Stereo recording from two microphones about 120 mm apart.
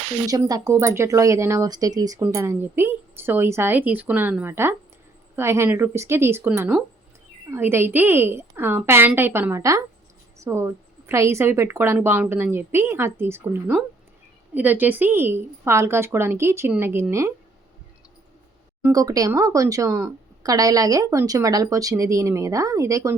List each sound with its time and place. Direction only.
0.3 s a woman's voice: 30° right (ahead or behind)
18.9 s speech: 30° right (ahead or behind)